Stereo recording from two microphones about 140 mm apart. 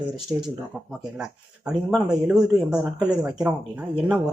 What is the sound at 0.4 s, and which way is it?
Speech, 5° right (ahead or behind).